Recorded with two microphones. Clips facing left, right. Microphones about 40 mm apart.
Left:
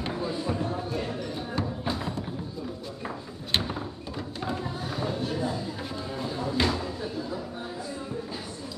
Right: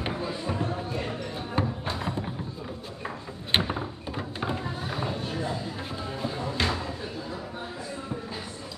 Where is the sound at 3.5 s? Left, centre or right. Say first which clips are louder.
Right 3 dB; right.